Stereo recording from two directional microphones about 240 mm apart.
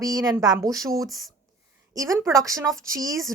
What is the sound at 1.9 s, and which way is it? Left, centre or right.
A woman's voice, centre.